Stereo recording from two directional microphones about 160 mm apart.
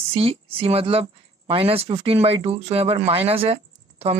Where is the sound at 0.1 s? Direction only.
35° right (ahead or behind).